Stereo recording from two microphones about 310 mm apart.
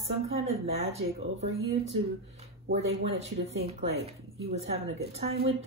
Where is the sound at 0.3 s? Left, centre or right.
Centre.